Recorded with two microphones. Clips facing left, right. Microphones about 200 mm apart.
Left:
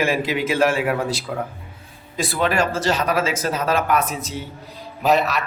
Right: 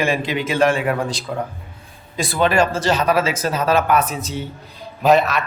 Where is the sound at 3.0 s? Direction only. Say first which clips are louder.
Right 3 dB; 30° right (ahead or behind).